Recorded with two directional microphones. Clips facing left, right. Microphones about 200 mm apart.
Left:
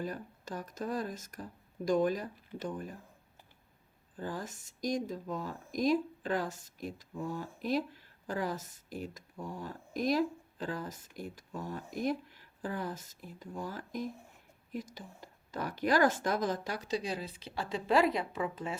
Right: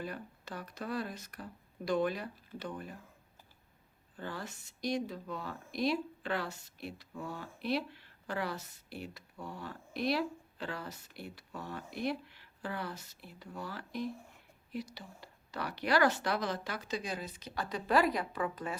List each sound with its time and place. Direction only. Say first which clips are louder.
0.0 s speech: left 3 dB; 45° left (ahead or behind)
4.2 s speech: left 3 dB; 40° left (ahead or behind); by 18.8 s 25° left (ahead or behind)